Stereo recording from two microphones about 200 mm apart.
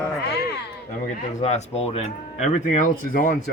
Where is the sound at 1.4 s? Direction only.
35° left (ahead or behind).